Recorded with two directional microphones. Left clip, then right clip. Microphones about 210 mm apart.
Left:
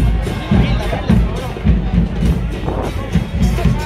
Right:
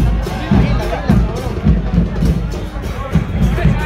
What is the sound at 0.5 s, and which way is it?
Music, 55° right (ahead or behind).